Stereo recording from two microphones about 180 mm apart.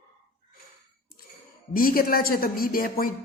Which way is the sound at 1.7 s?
55° left (ahead or behind).